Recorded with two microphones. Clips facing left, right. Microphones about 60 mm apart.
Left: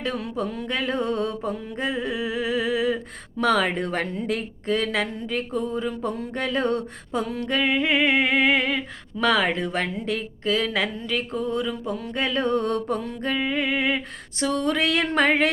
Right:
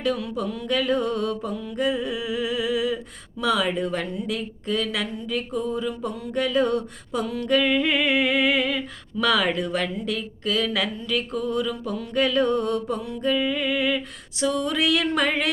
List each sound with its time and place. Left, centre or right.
0.0 s speech: left
3.4 s speech: left